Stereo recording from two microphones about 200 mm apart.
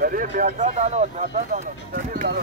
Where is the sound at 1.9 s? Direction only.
45° right (ahead or behind).